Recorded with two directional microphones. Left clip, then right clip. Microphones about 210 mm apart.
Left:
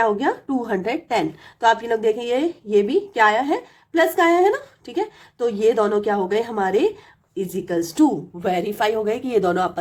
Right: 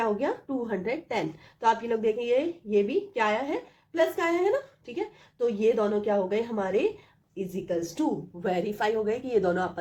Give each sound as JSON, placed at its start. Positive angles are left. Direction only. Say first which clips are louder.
{"t": 0.0, "sound": "a woman's voice", "louder": "left 8 dB", "side_deg": 45}
{"t": 8.4, "sound": "a woman's voice", "louder": "left 7 dB", "side_deg": 30}